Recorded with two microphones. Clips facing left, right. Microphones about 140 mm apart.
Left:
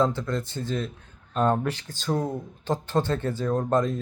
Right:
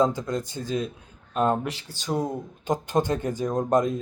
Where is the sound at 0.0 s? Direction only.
15° right (ahead or behind).